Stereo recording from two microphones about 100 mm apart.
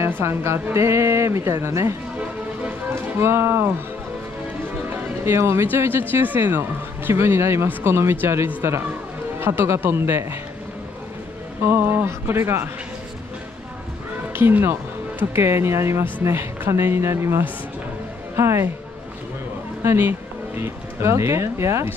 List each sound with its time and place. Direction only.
0.0 s speech: 25° right (ahead or behind)
4.8 s speech: 25° right (ahead or behind)
11.6 s speech: 25° right (ahead or behind)
14.3 s speech: 20° right (ahead or behind)
19.8 s speech: 25° right (ahead or behind)